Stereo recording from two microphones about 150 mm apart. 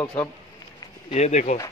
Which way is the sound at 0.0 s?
25° left (ahead or behind).